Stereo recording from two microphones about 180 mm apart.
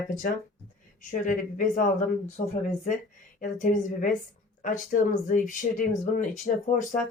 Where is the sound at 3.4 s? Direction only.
45° left (ahead or behind).